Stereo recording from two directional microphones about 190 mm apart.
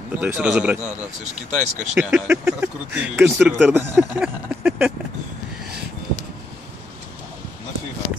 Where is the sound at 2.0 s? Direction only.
5° right (ahead or behind).